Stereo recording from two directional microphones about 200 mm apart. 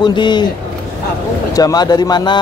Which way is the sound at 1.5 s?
20° left (ahead or behind).